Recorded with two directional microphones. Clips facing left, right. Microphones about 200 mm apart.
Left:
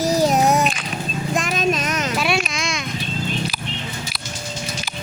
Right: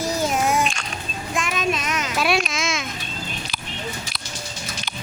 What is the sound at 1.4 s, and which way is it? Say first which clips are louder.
Child singing: left 2 dB; 40° left (ahead or behind).